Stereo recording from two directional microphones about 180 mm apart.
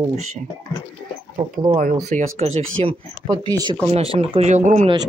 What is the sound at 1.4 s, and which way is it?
Speech, 25° right (ahead or behind).